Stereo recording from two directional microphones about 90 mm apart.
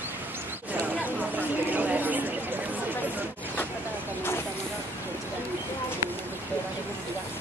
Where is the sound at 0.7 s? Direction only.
20° right (ahead or behind).